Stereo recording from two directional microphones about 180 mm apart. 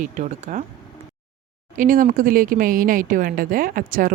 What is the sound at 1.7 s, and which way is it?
Speech, 50° right (ahead or behind).